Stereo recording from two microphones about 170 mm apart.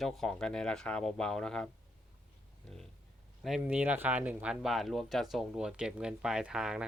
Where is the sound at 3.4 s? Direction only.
5° right (ahead or behind).